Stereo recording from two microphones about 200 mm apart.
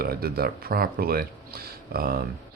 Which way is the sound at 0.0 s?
50° right (ahead or behind).